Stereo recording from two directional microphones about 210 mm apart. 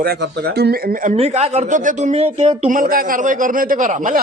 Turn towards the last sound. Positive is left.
turn(degrees=-40)  # may be behind; listen again after turning